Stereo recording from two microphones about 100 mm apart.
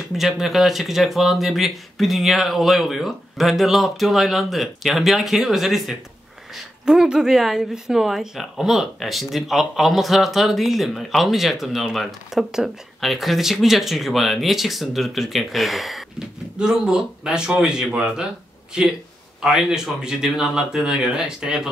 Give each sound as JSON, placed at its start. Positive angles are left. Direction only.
{"t": 0.1, "sound": "a woman's voice", "side_deg": 0}